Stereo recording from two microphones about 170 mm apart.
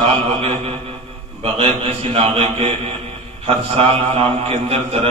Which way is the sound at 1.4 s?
35° right (ahead or behind).